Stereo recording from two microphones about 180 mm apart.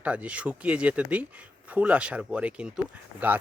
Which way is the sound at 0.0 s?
5° right (ahead or behind).